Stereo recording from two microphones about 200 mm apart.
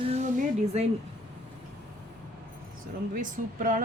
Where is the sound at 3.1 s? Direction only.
45° right (ahead or behind).